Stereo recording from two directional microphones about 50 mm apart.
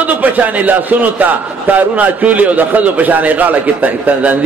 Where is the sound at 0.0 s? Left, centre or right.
Right.